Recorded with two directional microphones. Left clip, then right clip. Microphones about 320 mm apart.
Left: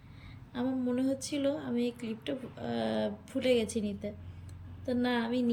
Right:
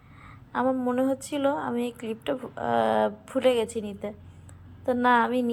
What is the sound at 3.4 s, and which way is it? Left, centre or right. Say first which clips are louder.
Speech: right 5 dB; right.